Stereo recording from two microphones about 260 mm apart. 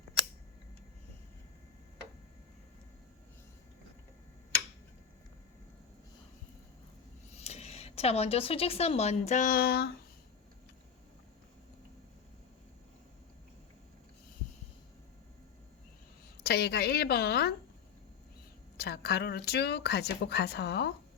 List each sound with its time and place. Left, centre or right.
7.3 s speech: left
16.4 s speech: left
18.8 s speech: left